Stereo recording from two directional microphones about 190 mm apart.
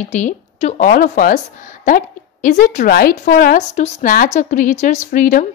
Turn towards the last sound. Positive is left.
turn(degrees=45)  # may be behind; listen again after turning